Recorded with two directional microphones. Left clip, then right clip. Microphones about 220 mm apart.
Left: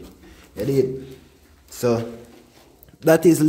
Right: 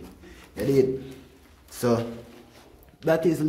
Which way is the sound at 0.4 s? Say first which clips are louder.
Left 1 dB; 15° left (ahead or behind).